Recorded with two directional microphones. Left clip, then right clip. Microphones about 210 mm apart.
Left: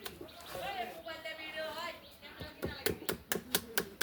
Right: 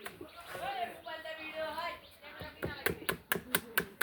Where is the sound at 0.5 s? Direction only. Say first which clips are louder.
Right 1 dB; 15° left (ahead or behind).